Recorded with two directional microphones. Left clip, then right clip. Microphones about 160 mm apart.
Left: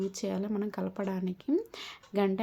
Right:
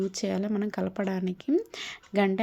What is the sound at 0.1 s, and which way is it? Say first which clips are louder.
Speech: right 4 dB; 20° right (ahead or behind).